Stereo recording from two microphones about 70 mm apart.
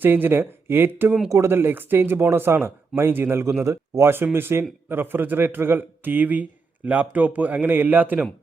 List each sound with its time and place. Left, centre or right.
0.0 s speech: right
3.4 s a man's voice: right